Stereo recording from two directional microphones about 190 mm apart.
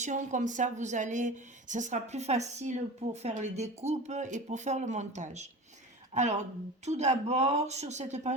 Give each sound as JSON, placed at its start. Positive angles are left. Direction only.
{"t": 0.0, "sound": "a woman's voice", "side_deg": -40}